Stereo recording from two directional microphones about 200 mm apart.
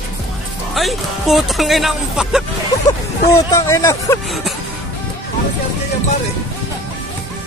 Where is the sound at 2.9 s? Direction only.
15° left (ahead or behind).